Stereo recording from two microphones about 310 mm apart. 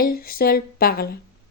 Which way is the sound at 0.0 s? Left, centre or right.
Left.